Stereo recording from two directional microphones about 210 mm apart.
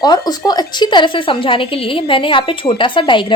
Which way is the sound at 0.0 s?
20° left (ahead or behind).